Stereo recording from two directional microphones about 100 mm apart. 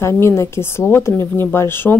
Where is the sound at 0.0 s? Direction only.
25° left (ahead or behind).